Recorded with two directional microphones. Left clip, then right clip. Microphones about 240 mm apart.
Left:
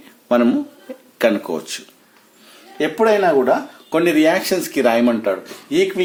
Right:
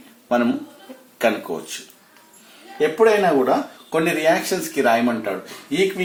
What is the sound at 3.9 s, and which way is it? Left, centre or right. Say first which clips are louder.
Speech: left 3 dB; left.